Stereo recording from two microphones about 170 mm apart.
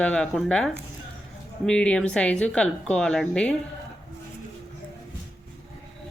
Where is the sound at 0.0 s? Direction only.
5° left (ahead or behind).